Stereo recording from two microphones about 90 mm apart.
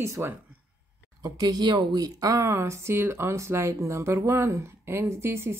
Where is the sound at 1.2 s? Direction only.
50° right (ahead or behind); by 5.5 s 30° right (ahead or behind).